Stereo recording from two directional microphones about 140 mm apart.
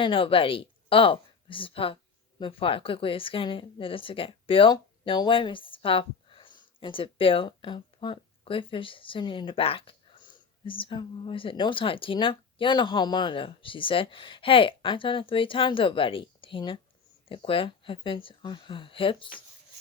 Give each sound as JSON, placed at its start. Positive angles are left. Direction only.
{"t": 0.0, "sound": "speech", "side_deg": 40}